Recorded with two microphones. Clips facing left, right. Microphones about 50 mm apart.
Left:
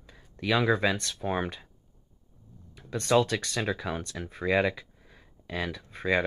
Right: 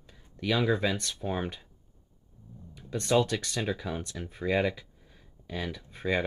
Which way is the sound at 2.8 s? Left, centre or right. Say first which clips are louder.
Left 2 dB; left.